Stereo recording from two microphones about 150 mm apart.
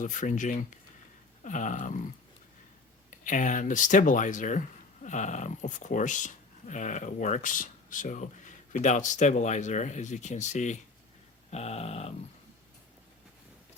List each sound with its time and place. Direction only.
0.0 s speech: 55° left (ahead or behind)
3.2 s speech: 55° left (ahead or behind)
11.5 s dog: 45° left (ahead or behind)